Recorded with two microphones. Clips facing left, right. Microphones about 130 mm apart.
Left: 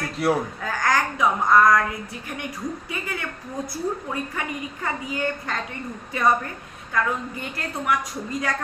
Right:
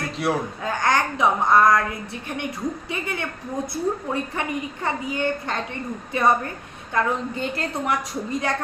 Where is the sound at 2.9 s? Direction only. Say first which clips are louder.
Right 2 dB; 25° right (ahead or behind).